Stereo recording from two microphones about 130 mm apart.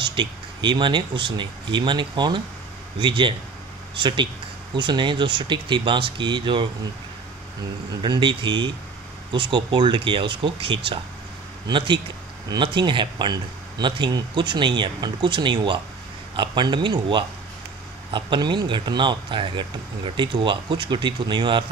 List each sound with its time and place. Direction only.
0.0 s speech: 35° right (ahead or behind)
8.0 s speech: 35° right (ahead or behind)